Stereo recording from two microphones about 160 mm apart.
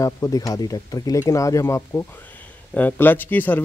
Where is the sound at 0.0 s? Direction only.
20° left (ahead or behind).